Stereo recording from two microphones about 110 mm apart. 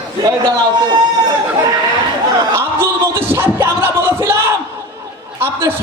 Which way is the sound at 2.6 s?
20° right (ahead or behind).